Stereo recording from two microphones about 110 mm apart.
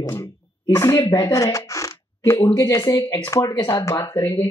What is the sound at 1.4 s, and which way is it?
Zipper, 30° left (ahead or behind).